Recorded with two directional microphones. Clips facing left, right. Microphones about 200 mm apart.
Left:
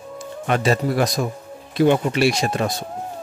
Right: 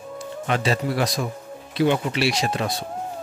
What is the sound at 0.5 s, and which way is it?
Speech, 45° left (ahead or behind).